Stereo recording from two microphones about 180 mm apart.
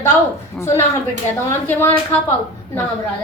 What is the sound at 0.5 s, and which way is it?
A woman's voice, 15° left (ahead or behind).